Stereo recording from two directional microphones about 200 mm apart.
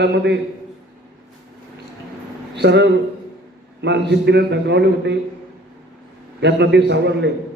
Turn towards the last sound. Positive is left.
turn(degrees=-60)  # may be behind; listen again after turning